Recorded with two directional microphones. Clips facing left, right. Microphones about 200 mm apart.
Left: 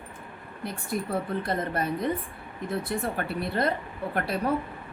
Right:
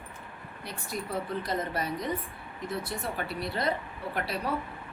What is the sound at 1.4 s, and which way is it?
Speech, 55° left (ahead or behind).